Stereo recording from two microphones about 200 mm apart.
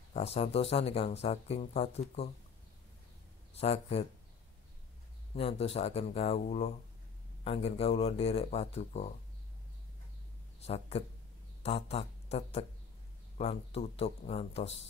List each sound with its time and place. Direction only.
0.1 s speech: 30° left (ahead or behind)
3.5 s speech: 30° left (ahead or behind)
5.3 s speech: 30° left (ahead or behind)
10.6 s speech: 30° left (ahead or behind)